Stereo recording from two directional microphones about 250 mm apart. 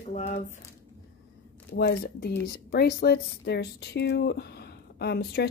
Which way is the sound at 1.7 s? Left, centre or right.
Left.